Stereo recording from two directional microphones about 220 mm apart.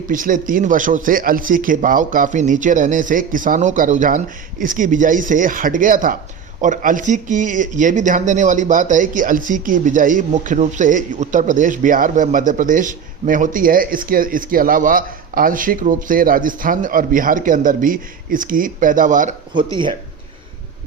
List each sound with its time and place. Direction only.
0.1 s speech: 35° right (ahead or behind)
19.7 s speech: 20° right (ahead or behind)